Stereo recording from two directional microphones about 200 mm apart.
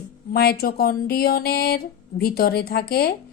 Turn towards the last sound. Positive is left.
turn(degrees=50)  # may be behind; listen again after turning